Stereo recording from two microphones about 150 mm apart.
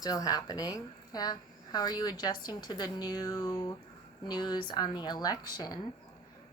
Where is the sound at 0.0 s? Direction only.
25° left (ahead or behind).